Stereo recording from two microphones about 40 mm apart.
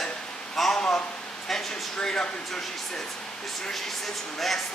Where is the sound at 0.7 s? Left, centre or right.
Left.